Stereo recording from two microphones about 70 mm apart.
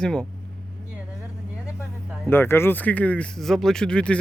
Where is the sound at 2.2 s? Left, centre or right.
Left.